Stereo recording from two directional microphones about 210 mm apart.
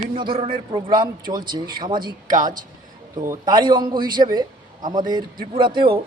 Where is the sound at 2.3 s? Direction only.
35° right (ahead or behind).